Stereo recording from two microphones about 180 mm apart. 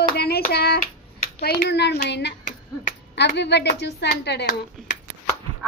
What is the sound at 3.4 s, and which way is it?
Speech, 70° left (ahead or behind).